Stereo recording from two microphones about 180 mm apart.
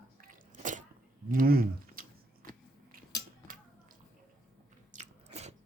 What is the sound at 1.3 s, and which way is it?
Speech, 55° right (ahead or behind).